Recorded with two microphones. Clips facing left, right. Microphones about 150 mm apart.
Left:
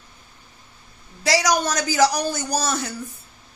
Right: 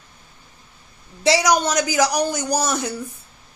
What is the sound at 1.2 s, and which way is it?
Speech, 20° right (ahead or behind).